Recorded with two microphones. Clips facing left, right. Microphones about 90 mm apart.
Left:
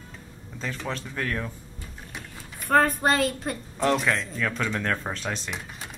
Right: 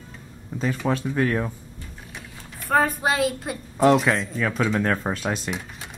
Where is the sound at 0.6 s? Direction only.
10° right (ahead or behind).